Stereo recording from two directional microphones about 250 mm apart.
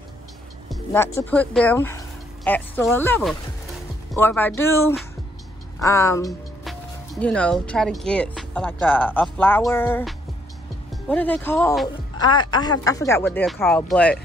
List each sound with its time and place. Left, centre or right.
0.7 s speech: centre
12.2 s speech: centre